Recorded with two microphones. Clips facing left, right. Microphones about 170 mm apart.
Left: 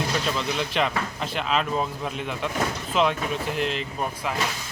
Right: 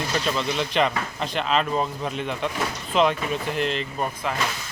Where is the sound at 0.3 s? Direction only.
Centre (ahead or behind).